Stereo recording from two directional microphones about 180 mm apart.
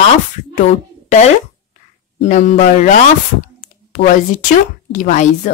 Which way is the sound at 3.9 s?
45° left (ahead or behind).